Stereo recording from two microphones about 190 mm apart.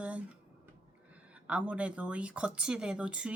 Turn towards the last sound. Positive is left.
turn(degrees=-5)  # may be behind; listen again after turning